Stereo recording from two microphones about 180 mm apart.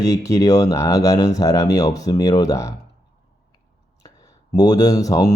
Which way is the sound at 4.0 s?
20° left (ahead or behind).